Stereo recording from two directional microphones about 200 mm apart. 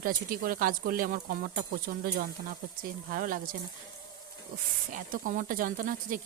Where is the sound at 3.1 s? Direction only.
45° right (ahead or behind).